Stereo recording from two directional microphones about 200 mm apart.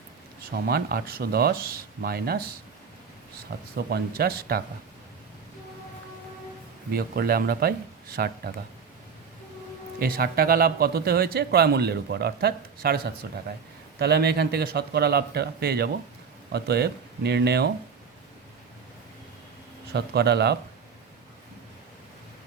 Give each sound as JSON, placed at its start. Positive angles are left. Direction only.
{"t": 0.5, "sound": "a man's voice", "side_deg": -50}
{"t": 3.8, "sound": "a man's voice", "side_deg": -55}
{"t": 6.9, "sound": "a man's voice", "side_deg": -50}
{"t": 10.0, "sound": "a man's voice", "side_deg": -50}
{"t": 19.9, "sound": "speech", "side_deg": -55}